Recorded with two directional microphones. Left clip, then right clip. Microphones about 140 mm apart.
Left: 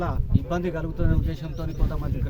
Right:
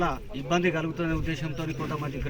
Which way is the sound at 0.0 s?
10° left (ahead or behind).